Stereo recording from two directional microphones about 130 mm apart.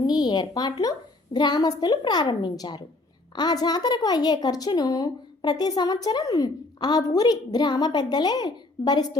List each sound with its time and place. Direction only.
0.0 s a woman's voice: 30° left (ahead or behind)